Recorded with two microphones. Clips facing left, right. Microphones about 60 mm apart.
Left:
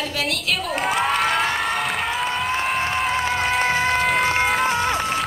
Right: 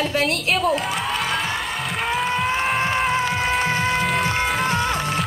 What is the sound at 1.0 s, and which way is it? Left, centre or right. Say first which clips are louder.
Music: left 4 dB; left.